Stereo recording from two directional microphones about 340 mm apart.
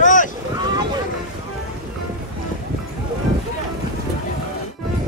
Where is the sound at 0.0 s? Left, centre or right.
Left.